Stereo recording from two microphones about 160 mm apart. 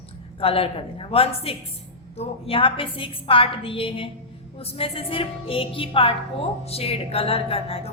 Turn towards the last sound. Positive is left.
turn(degrees=35)  # may be behind; listen again after turning